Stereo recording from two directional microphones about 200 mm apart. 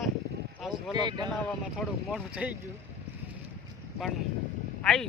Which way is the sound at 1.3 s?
5° left (ahead or behind).